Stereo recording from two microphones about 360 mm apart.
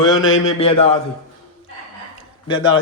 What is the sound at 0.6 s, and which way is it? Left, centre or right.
Speech, centre.